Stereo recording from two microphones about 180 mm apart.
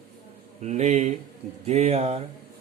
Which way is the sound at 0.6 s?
40° right (ahead or behind).